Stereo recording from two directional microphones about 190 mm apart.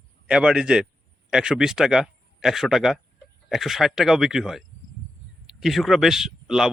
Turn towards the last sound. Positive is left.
turn(degrees=-5)  # may be behind; listen again after turning